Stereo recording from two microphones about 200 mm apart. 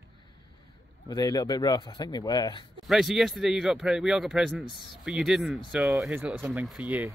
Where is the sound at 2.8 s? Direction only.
Centre (ahead or behind).